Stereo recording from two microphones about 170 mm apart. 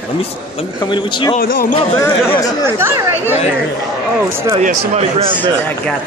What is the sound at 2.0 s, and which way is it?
Speech, 20° left (ahead or behind).